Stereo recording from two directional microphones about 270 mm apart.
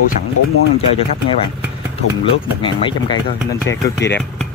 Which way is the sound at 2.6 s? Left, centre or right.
Centre.